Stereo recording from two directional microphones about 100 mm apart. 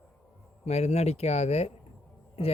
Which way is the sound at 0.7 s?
90° left.